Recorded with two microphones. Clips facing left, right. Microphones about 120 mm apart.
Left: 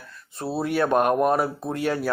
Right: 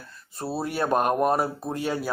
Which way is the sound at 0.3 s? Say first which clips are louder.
Left 4 dB; centre (ahead or behind).